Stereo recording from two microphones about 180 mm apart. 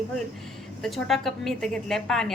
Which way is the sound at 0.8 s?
Centre (ahead or behind).